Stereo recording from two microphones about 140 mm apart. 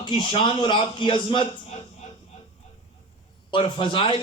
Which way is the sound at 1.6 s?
50° left (ahead or behind).